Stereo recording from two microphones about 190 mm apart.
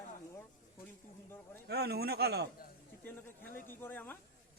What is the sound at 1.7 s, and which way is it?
Speech, 60° right (ahead or behind).